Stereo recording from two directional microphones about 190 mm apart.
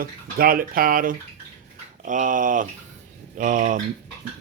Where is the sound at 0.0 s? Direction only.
50° right (ahead or behind).